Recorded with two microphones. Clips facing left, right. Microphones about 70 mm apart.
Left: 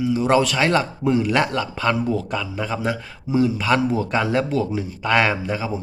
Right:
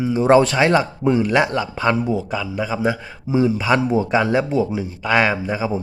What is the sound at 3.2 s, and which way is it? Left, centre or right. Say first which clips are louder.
A man's voice: right 2 dB; right.